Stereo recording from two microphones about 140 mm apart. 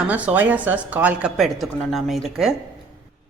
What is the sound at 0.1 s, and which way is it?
Speech, 10° right (ahead or behind).